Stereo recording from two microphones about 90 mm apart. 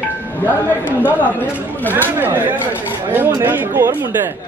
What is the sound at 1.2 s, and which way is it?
Speech, 20° left (ahead or behind).